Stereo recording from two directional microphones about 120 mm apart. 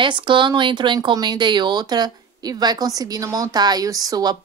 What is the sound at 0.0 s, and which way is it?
Speech, 45° right (ahead or behind).